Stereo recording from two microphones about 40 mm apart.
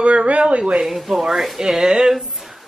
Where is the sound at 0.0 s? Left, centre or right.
Right.